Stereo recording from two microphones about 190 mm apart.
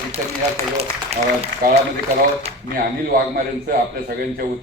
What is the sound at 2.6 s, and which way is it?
A man's voice, 50° right (ahead or behind).